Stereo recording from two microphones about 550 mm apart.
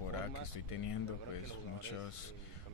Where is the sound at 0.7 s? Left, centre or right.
Left.